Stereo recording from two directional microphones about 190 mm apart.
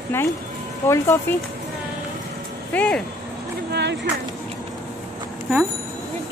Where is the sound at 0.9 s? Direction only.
15° left (ahead or behind).